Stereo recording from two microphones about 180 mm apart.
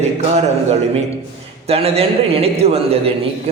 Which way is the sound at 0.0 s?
35° right (ahead or behind).